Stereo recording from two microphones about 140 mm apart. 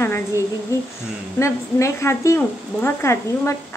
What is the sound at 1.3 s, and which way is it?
A woman's voice, 20° left (ahead or behind).